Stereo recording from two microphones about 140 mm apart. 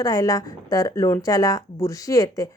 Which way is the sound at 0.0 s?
25° left (ahead or behind).